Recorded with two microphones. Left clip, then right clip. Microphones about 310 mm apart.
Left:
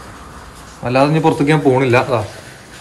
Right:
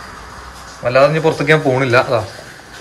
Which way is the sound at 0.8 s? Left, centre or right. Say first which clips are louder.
Right 2 dB; centre.